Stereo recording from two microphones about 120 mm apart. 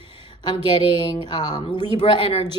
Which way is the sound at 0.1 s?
40° left (ahead or behind).